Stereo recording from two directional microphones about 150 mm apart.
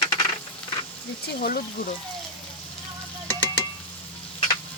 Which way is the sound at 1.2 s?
80° left.